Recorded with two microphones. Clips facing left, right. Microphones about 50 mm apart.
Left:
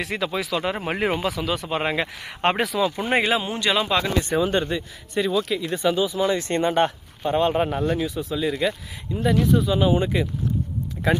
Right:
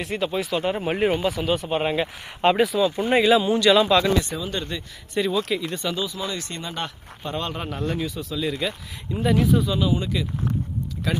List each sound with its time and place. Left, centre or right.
0.0 s speech: left
2.4 s speech: left
2.6 s speech: left
2.9 s speech: left
3.3 s speech: left
5.1 s speech: centre
5.8 s speech: centre; by 6.9 s left
7.3 s speech: left
7.8 s speech: centre
9.2 s speech: centre
9.7 s speech: left